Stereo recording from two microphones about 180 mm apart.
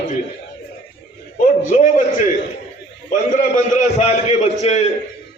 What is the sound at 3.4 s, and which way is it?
A man's voice, 40° left (ahead or behind).